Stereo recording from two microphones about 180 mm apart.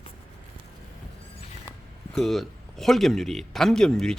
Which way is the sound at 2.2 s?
Centre (ahead or behind).